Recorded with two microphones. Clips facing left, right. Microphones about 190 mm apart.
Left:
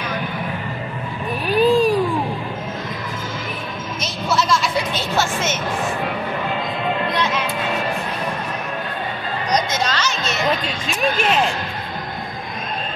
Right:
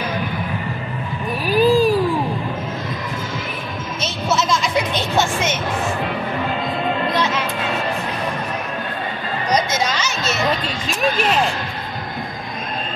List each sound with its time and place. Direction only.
1.5 s baby cry: 5° right (ahead or behind)
4.0 s music: 20° right (ahead or behind)
9.8 s a sound: 10° right (ahead or behind)
10.9 s speech: 5° left (ahead or behind)